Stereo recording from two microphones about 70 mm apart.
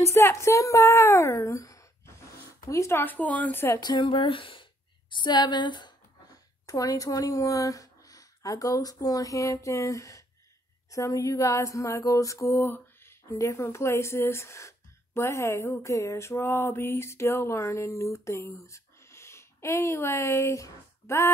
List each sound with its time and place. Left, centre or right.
0.0 s speech: left
2.7 s a sound: left
3.0 s speech: left
3.5 s speech: left
5.1 s speech: left
6.6 s speech: left
10.9 s a sound: left
12.6 s speech: left
15.9 s a sound: left